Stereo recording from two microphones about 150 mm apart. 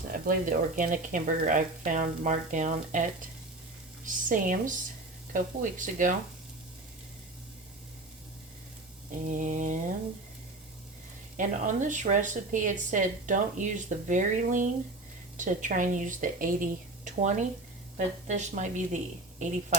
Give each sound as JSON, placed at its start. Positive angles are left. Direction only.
{"t": 0.1, "sound": "speech", "side_deg": -65}
{"t": 9.2, "sound": "speech", "side_deg": -60}
{"t": 11.3, "sound": "speech", "side_deg": -55}